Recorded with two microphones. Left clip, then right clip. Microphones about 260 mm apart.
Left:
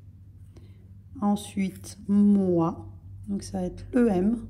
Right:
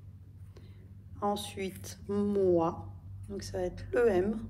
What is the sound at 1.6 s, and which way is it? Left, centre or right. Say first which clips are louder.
A woman's voice: left 3 dB; centre.